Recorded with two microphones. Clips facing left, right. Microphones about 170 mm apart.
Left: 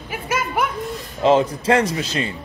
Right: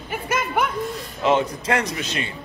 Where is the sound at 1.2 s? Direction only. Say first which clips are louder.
Left 4 dB; 30° left (ahead or behind).